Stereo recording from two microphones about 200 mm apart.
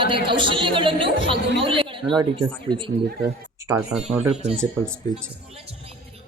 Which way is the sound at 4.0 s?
30° right (ahead or behind).